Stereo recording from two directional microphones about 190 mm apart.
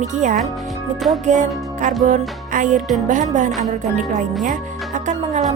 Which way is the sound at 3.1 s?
40° right (ahead or behind).